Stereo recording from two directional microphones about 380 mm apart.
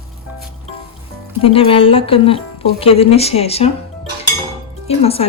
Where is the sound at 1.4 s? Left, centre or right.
Centre.